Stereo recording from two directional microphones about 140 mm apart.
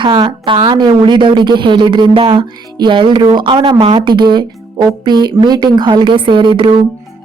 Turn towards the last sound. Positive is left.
turn(degrees=-35)  # may be behind; listen again after turning